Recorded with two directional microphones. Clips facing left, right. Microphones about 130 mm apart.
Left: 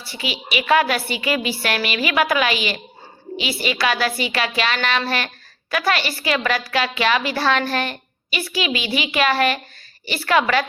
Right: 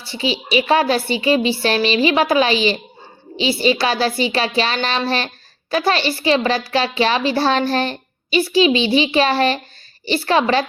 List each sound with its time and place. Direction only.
0.0 s a woman's voice: 30° right (ahead or behind)